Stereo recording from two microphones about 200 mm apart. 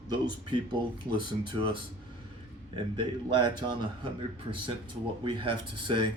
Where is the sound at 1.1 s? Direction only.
25° right (ahead or behind).